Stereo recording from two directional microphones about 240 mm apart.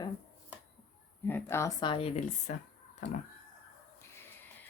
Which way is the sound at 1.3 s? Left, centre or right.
Centre.